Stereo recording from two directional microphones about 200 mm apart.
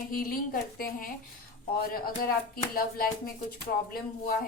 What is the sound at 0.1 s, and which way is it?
A woman's voice, 45° left (ahead or behind).